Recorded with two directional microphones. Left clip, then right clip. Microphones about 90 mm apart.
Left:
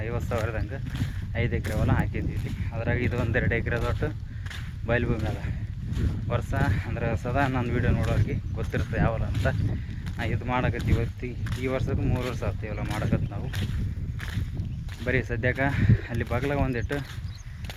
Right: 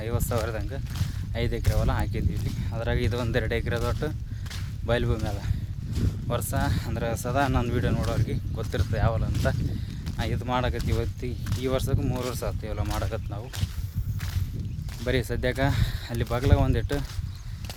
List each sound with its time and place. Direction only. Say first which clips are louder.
0.0 s speech: right 1 dB; 35° right (ahead or behind)
1.6 s speech: even; 20° right (ahead or behind)
1.9 s speech: left 1 dB; 30° right (ahead or behind)
8.8 s speech: left 1 dB; 30° right (ahead or behind)
12.9 s speech: left 1 dB; 30° right (ahead or behind)
15.0 s speech: even; 35° right (ahead or behind)